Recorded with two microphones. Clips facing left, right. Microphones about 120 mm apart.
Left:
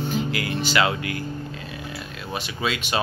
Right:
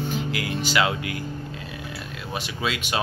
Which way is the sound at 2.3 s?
5° right (ahead or behind).